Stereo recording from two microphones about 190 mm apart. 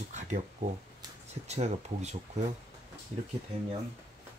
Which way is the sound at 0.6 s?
40° right (ahead or behind).